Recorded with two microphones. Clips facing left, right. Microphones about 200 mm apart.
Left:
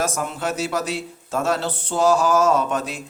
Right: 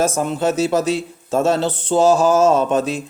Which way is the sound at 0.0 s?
25° right (ahead or behind).